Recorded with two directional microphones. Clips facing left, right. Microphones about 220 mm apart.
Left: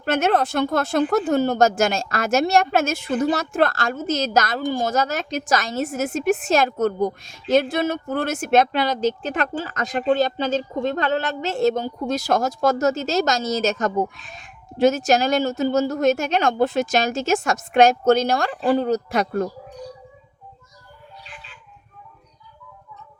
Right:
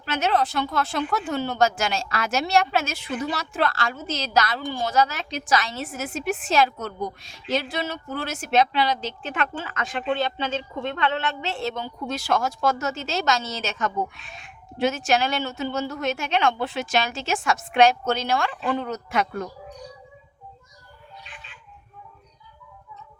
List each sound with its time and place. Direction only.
0.0 s speech: 50° left (ahead or behind)